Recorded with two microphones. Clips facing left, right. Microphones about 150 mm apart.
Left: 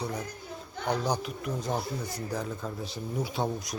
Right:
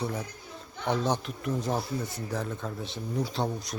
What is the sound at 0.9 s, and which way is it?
Speech, centre (ahead or behind).